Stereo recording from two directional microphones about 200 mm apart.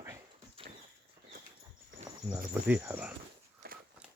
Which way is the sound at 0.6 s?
30° right (ahead or behind).